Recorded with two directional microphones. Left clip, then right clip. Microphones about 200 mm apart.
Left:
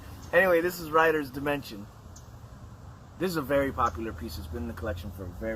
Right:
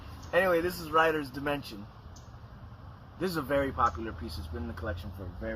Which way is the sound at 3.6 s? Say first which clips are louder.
Left 1 dB; centre (ahead or behind).